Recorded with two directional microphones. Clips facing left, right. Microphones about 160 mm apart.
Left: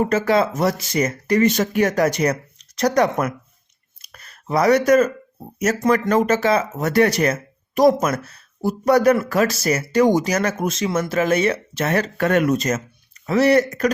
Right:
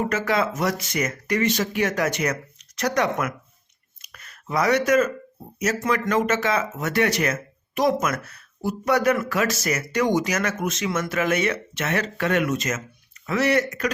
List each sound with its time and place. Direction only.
0.1 s speech: 30° left (ahead or behind)
1.5 s speech: 45° left (ahead or behind)
4.0 s a sound: 35° left (ahead or behind)
5.5 s speech: 45° left (ahead or behind)